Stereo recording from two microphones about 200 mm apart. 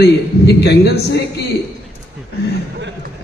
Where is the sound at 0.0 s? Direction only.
55° left (ahead or behind).